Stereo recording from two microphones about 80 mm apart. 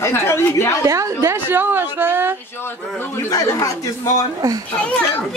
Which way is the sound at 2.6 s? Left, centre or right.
Left.